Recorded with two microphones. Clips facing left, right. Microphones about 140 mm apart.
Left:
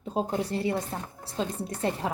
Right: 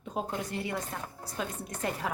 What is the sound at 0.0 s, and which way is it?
A woman's voice, 30° left (ahead or behind).